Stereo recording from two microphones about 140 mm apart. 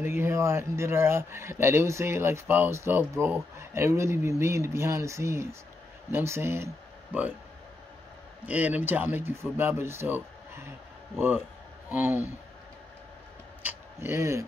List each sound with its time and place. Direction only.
0.0 s speech: 15° right (ahead or behind)
8.5 s speech: 10° right (ahead or behind)
13.7 s speech: 20° right (ahead or behind)